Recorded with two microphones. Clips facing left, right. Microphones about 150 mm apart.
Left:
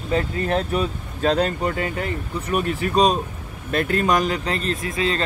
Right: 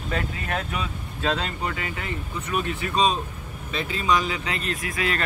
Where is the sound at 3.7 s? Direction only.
55° left (ahead or behind); by 5.2 s 25° left (ahead or behind).